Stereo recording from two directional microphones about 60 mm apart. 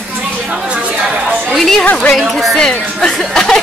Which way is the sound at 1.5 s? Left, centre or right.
Centre.